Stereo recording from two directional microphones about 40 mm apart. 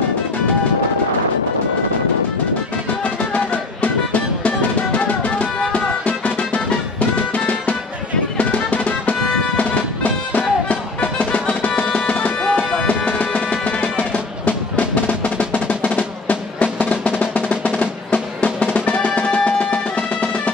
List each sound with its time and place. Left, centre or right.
3.3 s music: left
10.3 s music: left
11.9 s tabla: left
13.0 s music: left